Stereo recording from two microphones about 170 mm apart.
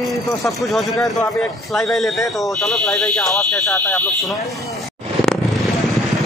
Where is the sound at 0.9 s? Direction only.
20° left (ahead or behind).